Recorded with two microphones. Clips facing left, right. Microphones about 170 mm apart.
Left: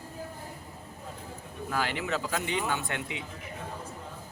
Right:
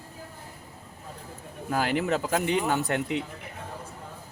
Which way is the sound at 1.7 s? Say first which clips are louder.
Right 5 dB; 40° right (ahead or behind).